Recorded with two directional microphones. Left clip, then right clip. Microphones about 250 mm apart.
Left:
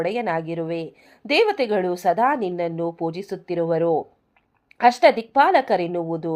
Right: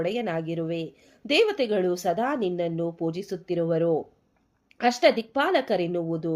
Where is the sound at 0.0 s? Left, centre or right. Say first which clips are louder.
Left 4 dB; centre.